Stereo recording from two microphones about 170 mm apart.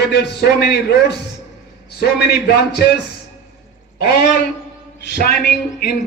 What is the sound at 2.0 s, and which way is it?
Speech, 75° left (ahead or behind).